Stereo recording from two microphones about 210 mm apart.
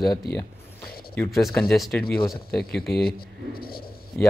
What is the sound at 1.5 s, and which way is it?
Speech, 5° left (ahead or behind).